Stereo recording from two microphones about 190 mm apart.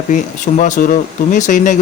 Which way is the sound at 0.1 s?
40° left (ahead or behind).